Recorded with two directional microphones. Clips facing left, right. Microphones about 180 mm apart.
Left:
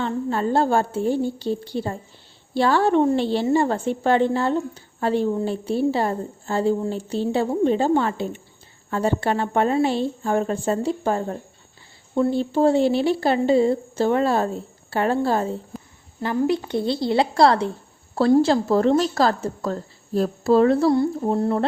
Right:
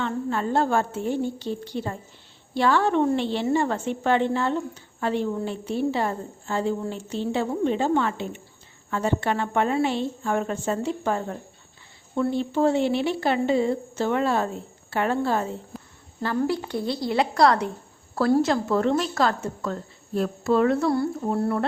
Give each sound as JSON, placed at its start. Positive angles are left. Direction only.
{"t": 0.0, "sound": "a woman's voice", "side_deg": 35}
{"t": 15.7, "sound": "a sound", "side_deg": 0}
{"t": 16.2, "sound": "a woman's voice", "side_deg": 20}